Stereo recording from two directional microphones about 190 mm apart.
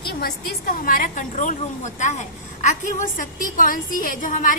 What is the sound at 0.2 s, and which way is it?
A woman's voice, 50° left (ahead or behind).